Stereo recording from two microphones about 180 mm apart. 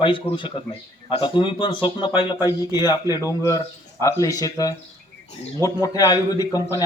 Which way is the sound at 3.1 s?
20° left (ahead or behind).